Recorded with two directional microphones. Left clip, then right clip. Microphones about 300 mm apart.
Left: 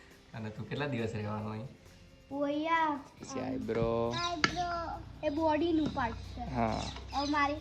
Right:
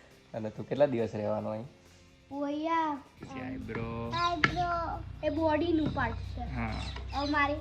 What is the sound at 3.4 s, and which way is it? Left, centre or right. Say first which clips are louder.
Speech: left 6 dB; centre.